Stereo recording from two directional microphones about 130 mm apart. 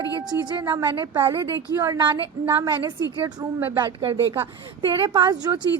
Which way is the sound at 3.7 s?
40° right (ahead or behind).